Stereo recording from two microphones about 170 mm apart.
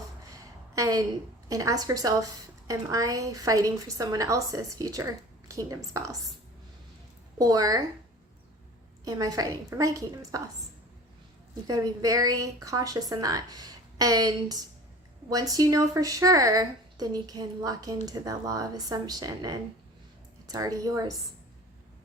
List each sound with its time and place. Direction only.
0.8 s a woman's voice: 20° right (ahead or behind)
7.3 s a woman's voice: 20° right (ahead or behind)
9.0 s a woman's voice: 20° right (ahead or behind)
11.7 s a woman's voice: 20° right (ahead or behind)